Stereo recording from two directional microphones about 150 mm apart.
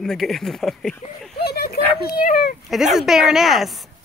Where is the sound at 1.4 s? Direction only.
90° left.